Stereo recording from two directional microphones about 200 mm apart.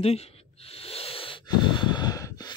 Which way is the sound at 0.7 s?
30° left (ahead or behind).